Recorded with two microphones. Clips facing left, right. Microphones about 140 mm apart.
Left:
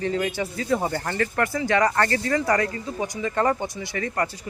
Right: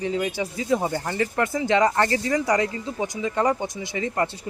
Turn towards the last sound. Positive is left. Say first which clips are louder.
# right 1 dB
turn(degrees=-20)  # may be behind; listen again after turning